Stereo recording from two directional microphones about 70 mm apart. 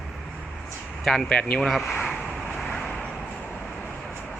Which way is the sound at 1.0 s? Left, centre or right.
Centre.